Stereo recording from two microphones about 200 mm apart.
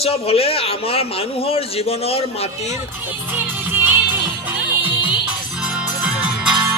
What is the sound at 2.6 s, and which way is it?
Music, 10° right (ahead or behind).